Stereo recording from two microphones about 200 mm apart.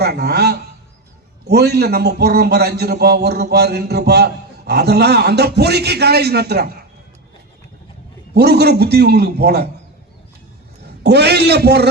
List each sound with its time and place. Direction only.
0.0 s a sound: 55° right (ahead or behind)
1.5 s a man's voice: 55° right (ahead or behind)
8.3 s a man's voice: 55° right (ahead or behind)
11.0 s a man's voice: 55° right (ahead or behind)